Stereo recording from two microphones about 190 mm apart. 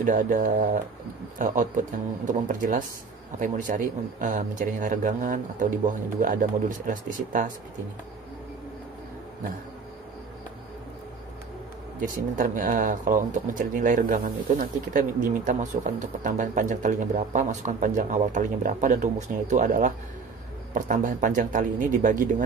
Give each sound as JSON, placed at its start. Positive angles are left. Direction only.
{"t": 0.0, "sound": "speech", "side_deg": -45}
{"t": 12.0, "sound": "speech", "side_deg": -45}